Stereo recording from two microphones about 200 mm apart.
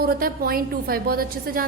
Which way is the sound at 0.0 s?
45° right (ahead or behind).